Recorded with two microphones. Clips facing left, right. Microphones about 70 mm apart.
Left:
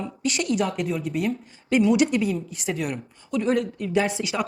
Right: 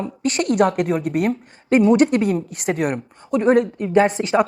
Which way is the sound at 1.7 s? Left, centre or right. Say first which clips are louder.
Right 5 dB; right.